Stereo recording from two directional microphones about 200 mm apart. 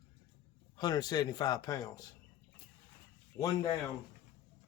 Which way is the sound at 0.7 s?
20° left (ahead or behind).